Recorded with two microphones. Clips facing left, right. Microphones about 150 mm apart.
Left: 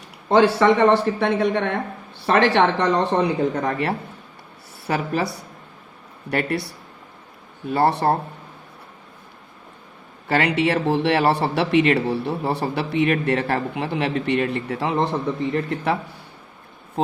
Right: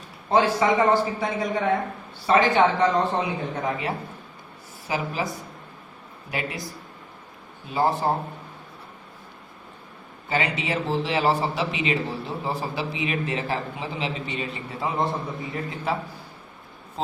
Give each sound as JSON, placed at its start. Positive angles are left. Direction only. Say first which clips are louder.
{"t": 0.3, "sound": "speech", "louder": "left 5 dB", "side_deg": 80}
{"t": 7.7, "sound": "speech", "louder": "left 4 dB", "side_deg": 70}
{"t": 10.2, "sound": "speech", "louder": "left 7 dB", "side_deg": 70}
{"t": 15.5, "sound": "speech", "louder": "left 5 dB", "side_deg": 70}